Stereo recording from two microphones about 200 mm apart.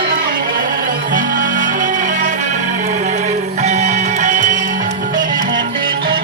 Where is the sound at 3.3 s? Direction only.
35° right (ahead or behind).